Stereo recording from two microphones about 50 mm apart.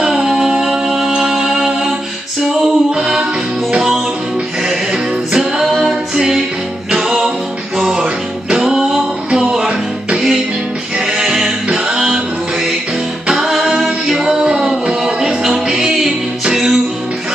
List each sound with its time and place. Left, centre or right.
0.0 s music: centre
4.6 s music: centre
11.0 s music: centre
14.2 s music: centre